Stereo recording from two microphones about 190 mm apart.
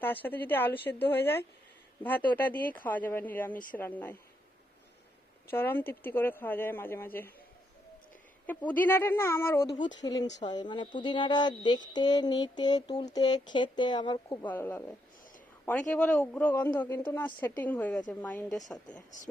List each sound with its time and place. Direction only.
0.0 s speech: 10° left (ahead or behind)
5.5 s speech: 10° left (ahead or behind)
8.4 s speech: 10° left (ahead or behind)
9.8 s a sound: 20° left (ahead or behind)
14.4 s speech: 10° left (ahead or behind)